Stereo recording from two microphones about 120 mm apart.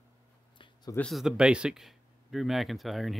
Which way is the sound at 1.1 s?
5° right (ahead or behind).